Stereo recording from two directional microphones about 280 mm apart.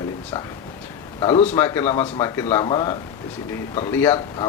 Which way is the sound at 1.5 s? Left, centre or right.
Centre.